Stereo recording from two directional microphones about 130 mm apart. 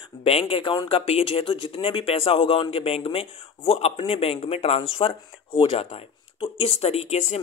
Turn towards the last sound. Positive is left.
turn(degrees=55)  # may be behind; listen again after turning